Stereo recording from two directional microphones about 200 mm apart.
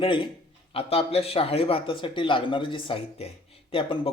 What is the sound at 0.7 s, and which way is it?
Speech, 30° left (ahead or behind).